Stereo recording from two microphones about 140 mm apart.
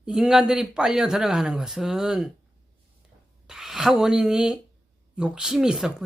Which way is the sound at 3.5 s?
5° right (ahead or behind).